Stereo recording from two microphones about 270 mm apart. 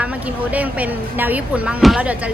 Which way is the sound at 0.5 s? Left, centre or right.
Centre.